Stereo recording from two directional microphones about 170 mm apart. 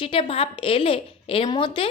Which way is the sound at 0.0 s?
30° left (ahead or behind).